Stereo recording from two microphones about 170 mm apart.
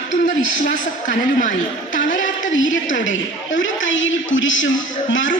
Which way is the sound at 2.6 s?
90° left.